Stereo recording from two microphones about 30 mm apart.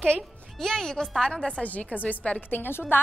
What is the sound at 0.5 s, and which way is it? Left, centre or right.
A woman's voice, centre.